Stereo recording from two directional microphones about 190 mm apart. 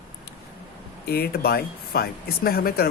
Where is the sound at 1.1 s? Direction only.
55° left (ahead or behind).